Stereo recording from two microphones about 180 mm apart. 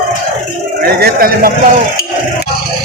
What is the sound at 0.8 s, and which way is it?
Speech, 60° right (ahead or behind).